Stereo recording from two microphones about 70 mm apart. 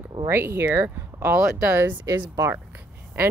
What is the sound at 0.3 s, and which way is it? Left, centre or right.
Speech, right.